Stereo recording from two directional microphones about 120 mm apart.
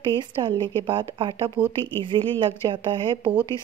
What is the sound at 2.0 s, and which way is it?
A woman's voice, 45° right (ahead or behind).